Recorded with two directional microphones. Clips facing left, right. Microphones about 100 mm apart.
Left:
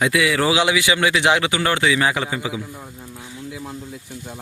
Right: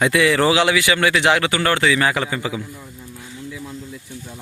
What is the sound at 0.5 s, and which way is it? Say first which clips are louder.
Speech: right 1 dB; 15° left (ahead or behind).